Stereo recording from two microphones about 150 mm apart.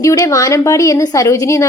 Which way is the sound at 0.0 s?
20° left (ahead or behind).